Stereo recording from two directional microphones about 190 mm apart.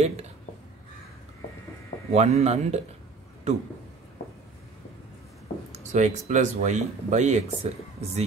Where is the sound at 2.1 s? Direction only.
35° right (ahead or behind).